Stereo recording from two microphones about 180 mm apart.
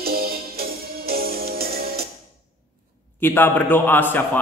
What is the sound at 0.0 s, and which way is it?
Music, 55° right (ahead or behind).